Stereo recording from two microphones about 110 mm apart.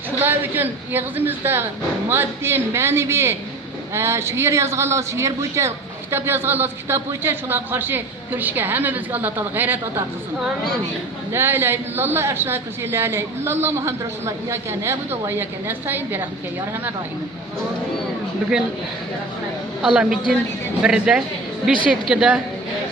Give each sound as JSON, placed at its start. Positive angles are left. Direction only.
{"t": 0.2, "sound": "speech", "side_deg": -20}
{"t": 11.3, "sound": "speech", "side_deg": -20}
{"t": 19.8, "sound": "a woman's voice", "side_deg": -10}